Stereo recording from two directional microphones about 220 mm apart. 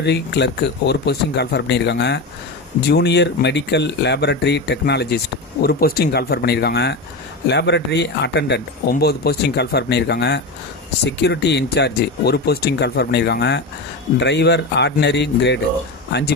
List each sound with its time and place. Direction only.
0.0 s speech: 50° left (ahead or behind)